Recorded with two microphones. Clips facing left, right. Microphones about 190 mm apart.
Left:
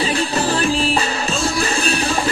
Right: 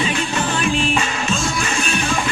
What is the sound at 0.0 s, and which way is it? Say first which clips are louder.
Music: left 2 dB; 35° left (ahead or behind).